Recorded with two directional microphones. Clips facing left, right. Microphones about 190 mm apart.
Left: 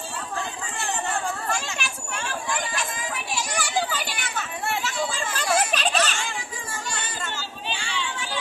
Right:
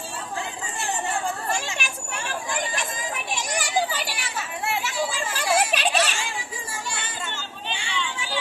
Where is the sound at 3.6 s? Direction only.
15° right (ahead or behind).